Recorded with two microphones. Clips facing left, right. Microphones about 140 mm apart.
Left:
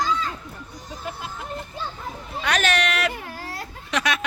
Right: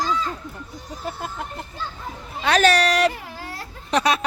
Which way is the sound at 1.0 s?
50° right (ahead or behind).